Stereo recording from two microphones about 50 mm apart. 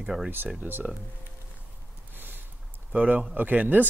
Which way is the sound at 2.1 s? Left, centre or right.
Right.